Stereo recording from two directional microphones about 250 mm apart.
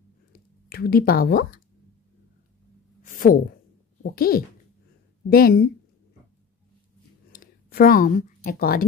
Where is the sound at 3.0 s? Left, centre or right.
Left.